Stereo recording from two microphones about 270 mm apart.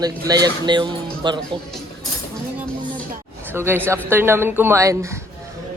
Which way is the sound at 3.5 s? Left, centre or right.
Centre.